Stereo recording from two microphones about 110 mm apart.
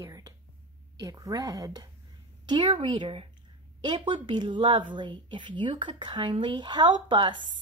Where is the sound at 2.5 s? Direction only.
50° right (ahead or behind).